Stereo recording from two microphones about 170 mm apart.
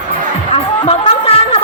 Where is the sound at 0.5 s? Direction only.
35° left (ahead or behind).